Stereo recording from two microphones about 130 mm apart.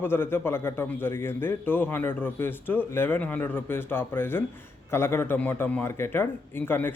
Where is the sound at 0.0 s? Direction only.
15° left (ahead or behind).